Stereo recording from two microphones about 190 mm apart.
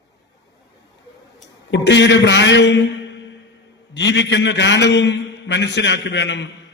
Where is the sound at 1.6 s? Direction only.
70° left (ahead or behind).